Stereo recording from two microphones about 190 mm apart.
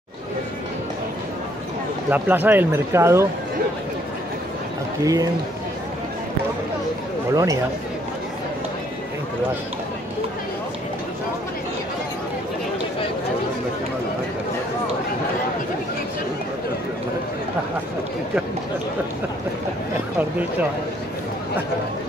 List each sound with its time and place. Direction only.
2.0 s speech: 10° right (ahead or behind)
5.0 s speech: 20° right (ahead or behind)
7.3 s speech: 20° right (ahead or behind)